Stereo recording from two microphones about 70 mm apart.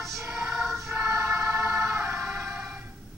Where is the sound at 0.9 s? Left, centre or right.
Right.